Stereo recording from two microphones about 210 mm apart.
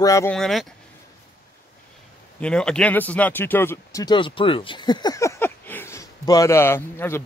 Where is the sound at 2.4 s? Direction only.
5° left (ahead or behind).